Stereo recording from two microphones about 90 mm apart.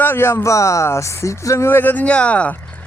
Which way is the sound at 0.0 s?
25° left (ahead or behind).